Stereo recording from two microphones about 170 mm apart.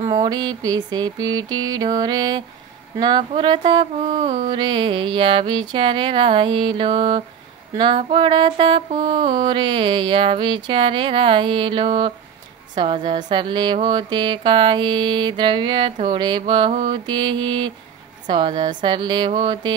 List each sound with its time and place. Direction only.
0.1 s mantra: 25° right (ahead or behind)